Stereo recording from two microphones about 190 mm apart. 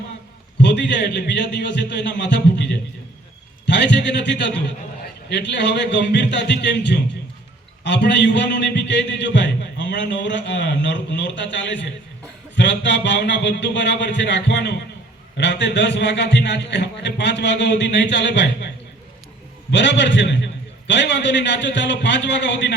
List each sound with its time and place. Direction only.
0.6 s a man's voice: 65° left (ahead or behind)
19.7 s a man's voice: 70° left (ahead or behind)